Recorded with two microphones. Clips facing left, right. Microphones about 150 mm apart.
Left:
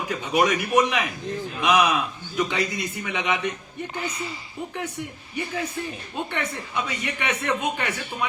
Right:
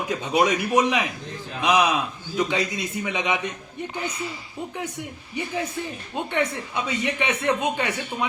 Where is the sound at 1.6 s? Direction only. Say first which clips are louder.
Even; 15° right (ahead or behind).